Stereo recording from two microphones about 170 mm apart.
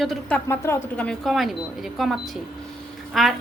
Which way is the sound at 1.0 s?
Centre (ahead or behind).